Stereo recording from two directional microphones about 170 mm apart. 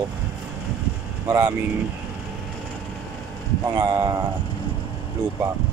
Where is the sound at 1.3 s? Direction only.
15° right (ahead or behind).